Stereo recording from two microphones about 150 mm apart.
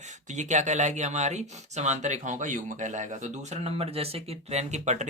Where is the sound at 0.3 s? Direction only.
50° right (ahead or behind).